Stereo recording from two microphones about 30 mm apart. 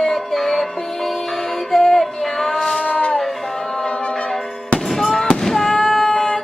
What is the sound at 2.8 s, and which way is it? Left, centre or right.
Shofar, left.